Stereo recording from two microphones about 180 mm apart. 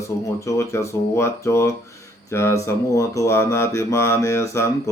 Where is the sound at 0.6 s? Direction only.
15° left (ahead or behind).